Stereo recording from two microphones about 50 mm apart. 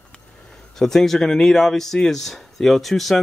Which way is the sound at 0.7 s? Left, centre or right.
Centre.